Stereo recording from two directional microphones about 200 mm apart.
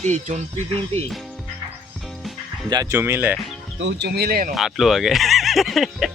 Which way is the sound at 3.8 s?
60° right (ahead or behind).